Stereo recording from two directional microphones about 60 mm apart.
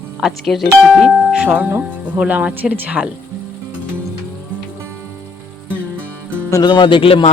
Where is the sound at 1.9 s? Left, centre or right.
Right.